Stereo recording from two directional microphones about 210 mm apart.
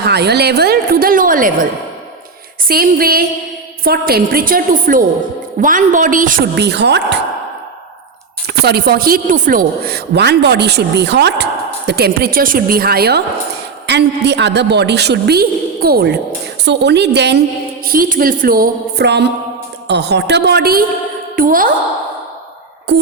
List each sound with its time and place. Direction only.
0.0 s a woman's voice: 50° right (ahead or behind)
2.6 s a woman's voice: 45° right (ahead or behind)
8.4 s speech: 50° right (ahead or behind)
17.8 s a woman's voice: 45° right (ahead or behind)
22.9 s a sound: 55° right (ahead or behind)